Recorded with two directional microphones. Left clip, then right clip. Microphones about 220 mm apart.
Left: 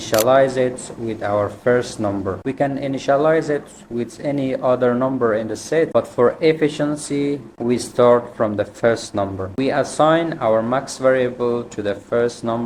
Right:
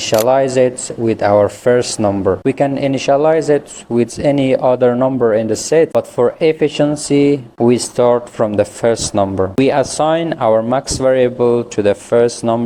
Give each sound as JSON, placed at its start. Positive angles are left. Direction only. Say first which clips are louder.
{"t": 0.3, "sound": "speech", "louder": "right 2 dB", "side_deg": -35}